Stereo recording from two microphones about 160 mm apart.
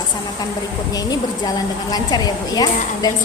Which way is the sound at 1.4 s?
25° left (ahead or behind).